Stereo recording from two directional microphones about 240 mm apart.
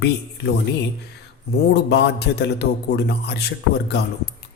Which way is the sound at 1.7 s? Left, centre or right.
Left.